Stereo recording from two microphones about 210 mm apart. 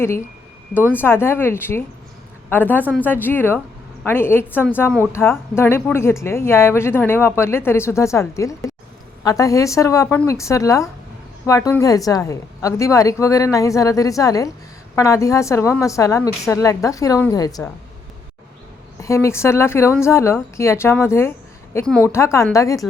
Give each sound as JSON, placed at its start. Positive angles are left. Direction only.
{"t": 0.7, "sound": "speech", "side_deg": 10}
{"t": 18.9, "sound": "speech", "side_deg": 15}